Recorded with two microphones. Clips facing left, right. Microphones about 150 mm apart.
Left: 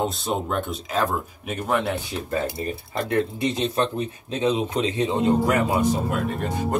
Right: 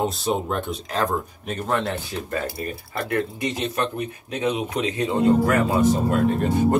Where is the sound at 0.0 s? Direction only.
Centre (ahead or behind).